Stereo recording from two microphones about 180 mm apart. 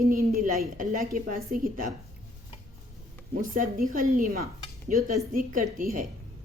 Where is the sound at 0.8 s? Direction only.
45° right (ahead or behind).